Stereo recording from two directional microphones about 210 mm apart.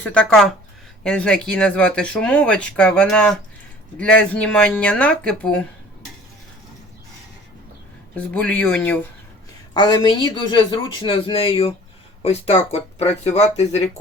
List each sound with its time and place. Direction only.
0.0 s speech: 5° left (ahead or behind)
8.1 s speech: 5° left (ahead or behind)
9.7 s speech: 20° left (ahead or behind)